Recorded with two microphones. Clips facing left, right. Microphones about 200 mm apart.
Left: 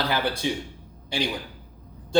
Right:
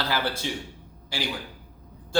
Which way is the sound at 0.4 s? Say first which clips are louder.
Left 5 dB; 15° left (ahead or behind).